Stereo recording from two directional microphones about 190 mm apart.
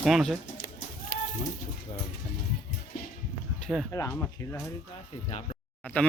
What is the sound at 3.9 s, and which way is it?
Speech, 15° left (ahead or behind).